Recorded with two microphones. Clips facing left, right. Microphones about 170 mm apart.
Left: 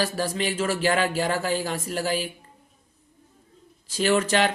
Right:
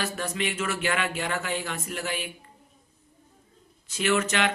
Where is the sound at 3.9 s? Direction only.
35° left (ahead or behind).